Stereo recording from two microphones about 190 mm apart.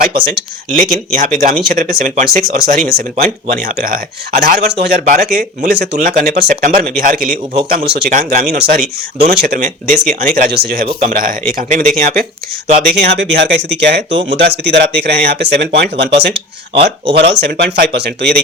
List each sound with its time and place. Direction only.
0.0 s speech: 55° right (ahead or behind)
3.5 s speech: 50° right (ahead or behind)
9.6 s speech: 40° right (ahead or behind)
12.9 s speech: 60° right (ahead or behind)